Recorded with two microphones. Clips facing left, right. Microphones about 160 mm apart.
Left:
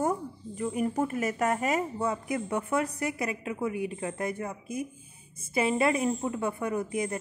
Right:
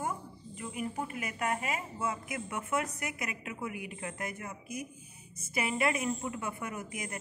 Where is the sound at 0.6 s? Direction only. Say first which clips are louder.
Left 9 dB; 40° left (ahead or behind).